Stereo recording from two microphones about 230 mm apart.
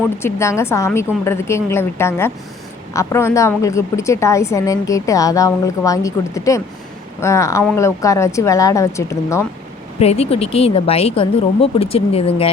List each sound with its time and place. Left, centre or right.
0.2 s a woman's voice: centre
10.0 s speech: left